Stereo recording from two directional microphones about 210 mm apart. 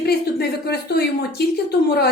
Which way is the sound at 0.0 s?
50° left (ahead or behind).